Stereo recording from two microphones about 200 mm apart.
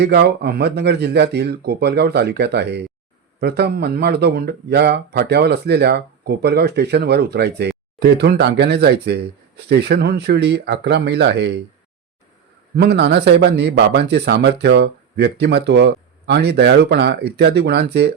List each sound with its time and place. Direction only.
0.0 s speech: 55° right (ahead or behind)
12.7 s speech: 55° right (ahead or behind)